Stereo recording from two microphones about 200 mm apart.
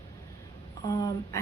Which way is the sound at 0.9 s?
15° left (ahead or behind).